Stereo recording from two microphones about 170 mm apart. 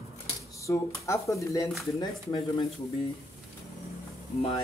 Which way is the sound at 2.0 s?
30° left (ahead or behind).